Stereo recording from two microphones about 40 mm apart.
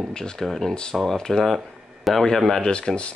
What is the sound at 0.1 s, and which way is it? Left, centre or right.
Speech, centre.